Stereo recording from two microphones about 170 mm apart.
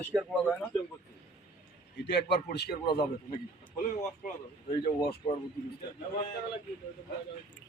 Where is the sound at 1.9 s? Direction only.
85° left.